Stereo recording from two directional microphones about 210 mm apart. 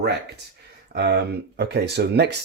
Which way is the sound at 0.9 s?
55° right (ahead or behind).